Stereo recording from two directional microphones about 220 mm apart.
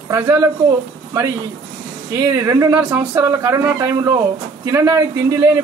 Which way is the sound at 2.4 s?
10° right (ahead or behind).